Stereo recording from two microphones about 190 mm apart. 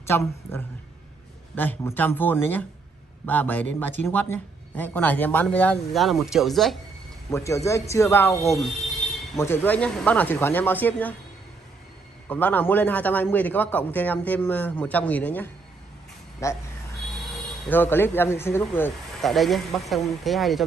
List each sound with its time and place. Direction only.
0.0 s a man's voice: 15° left (ahead or behind)
7.2 s a man's voice: 15° left (ahead or behind)
8.5 s speech: centre (ahead or behind)
9.4 s a man's voice: 10° left (ahead or behind)
12.3 s a man's voice: 10° left (ahead or behind)
16.3 s a sound: 15° left (ahead or behind)
17.3 s speech: 10° left (ahead or behind)
19.2 s speech: centre (ahead or behind)